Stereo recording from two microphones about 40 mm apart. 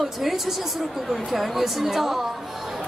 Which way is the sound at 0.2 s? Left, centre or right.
Centre.